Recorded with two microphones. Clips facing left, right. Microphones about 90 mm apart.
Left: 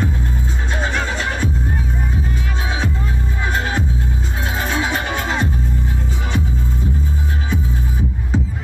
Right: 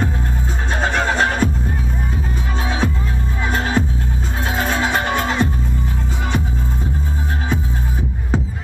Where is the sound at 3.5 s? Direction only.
45° right (ahead or behind).